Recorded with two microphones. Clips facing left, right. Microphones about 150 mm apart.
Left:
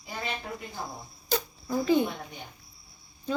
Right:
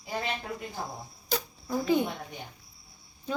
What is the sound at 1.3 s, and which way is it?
Insect, 10° right (ahead or behind).